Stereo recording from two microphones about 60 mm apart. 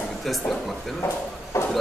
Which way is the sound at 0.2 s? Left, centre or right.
Centre.